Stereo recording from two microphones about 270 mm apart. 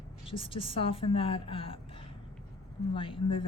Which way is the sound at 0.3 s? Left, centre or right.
Centre.